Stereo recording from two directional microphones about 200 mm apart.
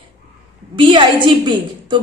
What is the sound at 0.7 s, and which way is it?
A woman's voice, 25° right (ahead or behind).